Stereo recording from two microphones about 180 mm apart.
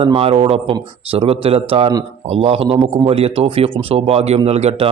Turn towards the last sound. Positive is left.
turn(degrees=-35)  # may be behind; listen again after turning